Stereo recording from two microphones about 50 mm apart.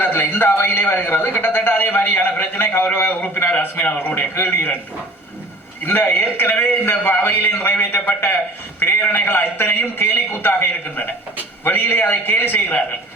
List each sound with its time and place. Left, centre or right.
0.0 s a man's voice: left
3.1 s a man's voice: left
5.8 s a man's voice: left